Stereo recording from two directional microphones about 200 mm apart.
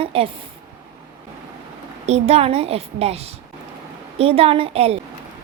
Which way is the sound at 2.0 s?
30° right (ahead or behind).